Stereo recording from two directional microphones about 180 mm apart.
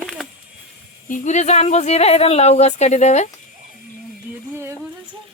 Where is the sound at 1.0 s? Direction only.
45° left (ahead or behind).